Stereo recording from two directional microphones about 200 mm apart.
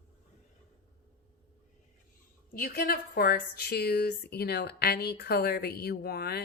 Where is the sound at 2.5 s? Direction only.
50° left (ahead or behind).